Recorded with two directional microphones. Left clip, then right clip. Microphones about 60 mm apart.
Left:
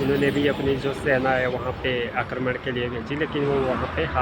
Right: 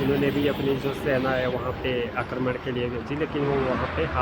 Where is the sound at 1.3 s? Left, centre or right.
Centre.